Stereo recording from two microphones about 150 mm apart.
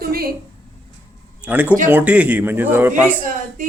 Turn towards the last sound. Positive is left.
turn(degrees=-60)  # may be behind; listen again after turning